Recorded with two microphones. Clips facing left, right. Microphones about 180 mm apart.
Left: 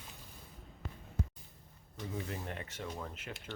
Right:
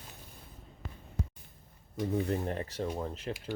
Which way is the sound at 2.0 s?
35° right (ahead or behind).